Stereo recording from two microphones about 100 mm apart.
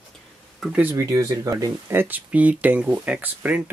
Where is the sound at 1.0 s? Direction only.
35° right (ahead or behind).